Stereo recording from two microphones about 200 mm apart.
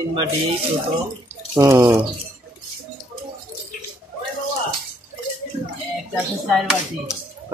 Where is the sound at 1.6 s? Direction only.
15° right (ahead or behind).